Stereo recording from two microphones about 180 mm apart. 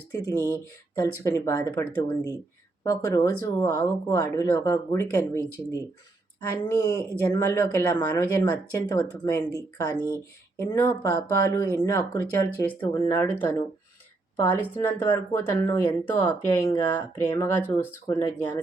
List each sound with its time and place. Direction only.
0.3 s speech: 15° left (ahead or behind)